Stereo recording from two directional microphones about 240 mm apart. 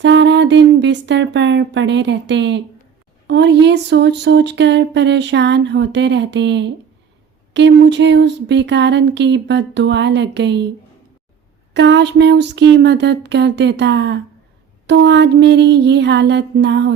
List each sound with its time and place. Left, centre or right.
0.0 s speech: right
11.7 s speech: right